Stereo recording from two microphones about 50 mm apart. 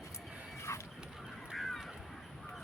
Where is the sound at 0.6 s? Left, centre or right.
Left.